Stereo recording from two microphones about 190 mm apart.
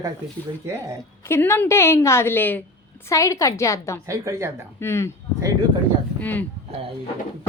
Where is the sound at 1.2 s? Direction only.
10° left (ahead or behind).